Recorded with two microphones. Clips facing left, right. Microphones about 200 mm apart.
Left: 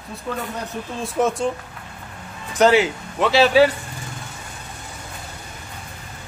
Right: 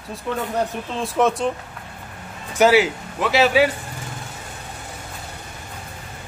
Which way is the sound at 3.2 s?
30° left (ahead or behind).